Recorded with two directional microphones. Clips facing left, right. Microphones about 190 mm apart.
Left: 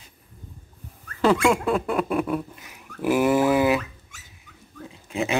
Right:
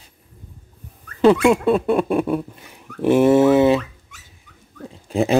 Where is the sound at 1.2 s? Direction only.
20° right (ahead or behind).